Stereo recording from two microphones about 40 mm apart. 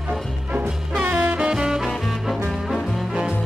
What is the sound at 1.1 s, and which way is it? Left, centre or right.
Swing music, right.